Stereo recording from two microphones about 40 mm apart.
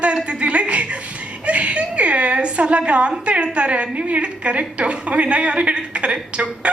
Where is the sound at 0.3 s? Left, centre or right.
Right.